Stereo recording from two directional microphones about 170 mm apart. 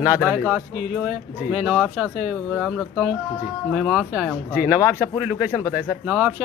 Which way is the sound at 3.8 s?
Centre (ahead or behind).